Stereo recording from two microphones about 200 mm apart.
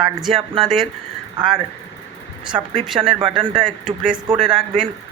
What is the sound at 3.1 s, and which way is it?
Speech, 25° right (ahead or behind).